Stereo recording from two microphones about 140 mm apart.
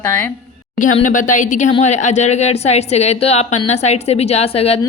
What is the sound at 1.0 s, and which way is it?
A woman's voice, 65° left (ahead or behind).